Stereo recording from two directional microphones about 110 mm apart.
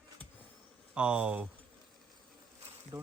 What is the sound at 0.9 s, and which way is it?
Speech, 10° right (ahead or behind).